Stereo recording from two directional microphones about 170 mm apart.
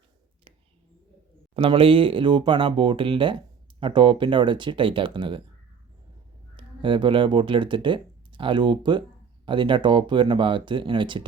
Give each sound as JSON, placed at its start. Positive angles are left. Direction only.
{"t": 1.5, "sound": "speech", "side_deg": -30}
{"t": 6.6, "sound": "speech", "side_deg": -30}